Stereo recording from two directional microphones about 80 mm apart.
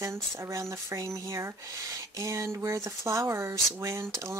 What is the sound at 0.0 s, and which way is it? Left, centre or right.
Speech, right.